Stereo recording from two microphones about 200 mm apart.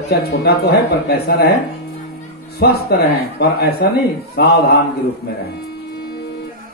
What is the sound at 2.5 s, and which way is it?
Speech, 50° left (ahead or behind).